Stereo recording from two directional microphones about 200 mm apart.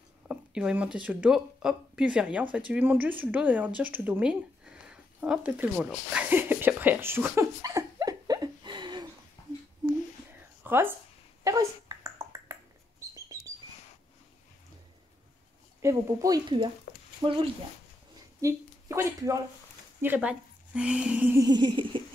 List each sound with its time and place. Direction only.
0.3 s speech: 5° right (ahead or behind); by 9.1 s 20° right (ahead or behind)
10.6 s speech: 10° right (ahead or behind)
11.4 s a sound: 15° right (ahead or behind)
15.8 s speech: 15° right (ahead or behind)
17.2 s rodents: 20° right (ahead or behind)
18.4 s a woman's voice: 15° right (ahead or behind)
21.5 s rodents: 20° right (ahead or behind)